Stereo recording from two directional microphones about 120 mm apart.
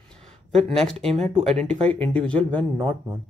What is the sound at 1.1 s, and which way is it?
Speech, 65° right (ahead or behind).